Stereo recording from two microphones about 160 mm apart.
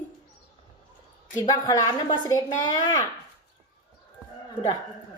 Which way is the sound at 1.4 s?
20° left (ahead or behind).